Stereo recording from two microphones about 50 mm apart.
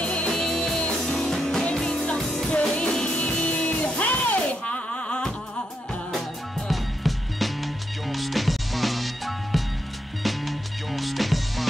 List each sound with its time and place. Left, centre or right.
0.0 s music: left
6.7 s music: centre